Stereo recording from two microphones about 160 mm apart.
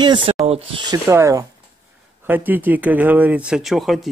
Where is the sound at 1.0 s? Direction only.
15° right (ahead or behind).